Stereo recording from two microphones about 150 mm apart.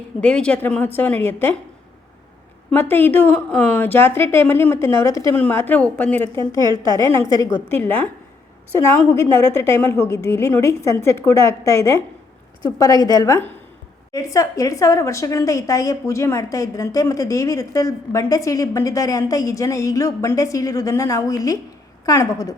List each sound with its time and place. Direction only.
0.2 s a woman's voice: 5° left (ahead or behind)
2.6 s a woman's voice: 15° left (ahead or behind)
6.3 s a woman's voice: 25° left (ahead or behind)